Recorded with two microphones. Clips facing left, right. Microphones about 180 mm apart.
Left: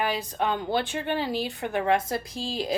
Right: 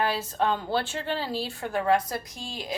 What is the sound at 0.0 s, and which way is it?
A woman's voice, 15° left (ahead or behind).